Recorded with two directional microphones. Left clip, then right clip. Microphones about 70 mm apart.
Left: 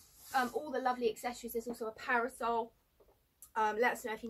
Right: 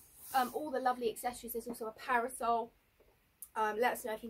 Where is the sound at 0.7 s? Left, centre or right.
Right.